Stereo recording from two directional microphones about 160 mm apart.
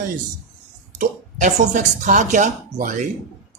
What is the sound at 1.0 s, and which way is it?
Speech, 50° right (ahead or behind).